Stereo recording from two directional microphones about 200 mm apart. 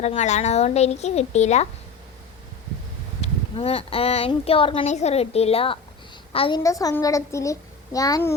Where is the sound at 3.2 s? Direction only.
30° left (ahead or behind).